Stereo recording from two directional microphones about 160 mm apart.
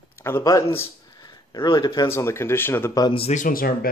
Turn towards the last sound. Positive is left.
turn(degrees=65)  # may be behind; listen again after turning